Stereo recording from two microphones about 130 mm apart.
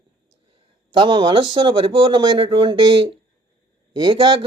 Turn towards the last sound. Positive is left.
turn(degrees=-40)  # may be behind; listen again after turning